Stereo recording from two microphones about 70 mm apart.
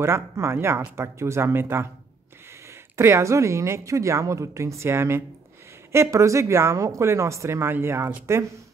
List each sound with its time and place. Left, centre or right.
0.0 s speech: right
3.0 s a woman's voice: right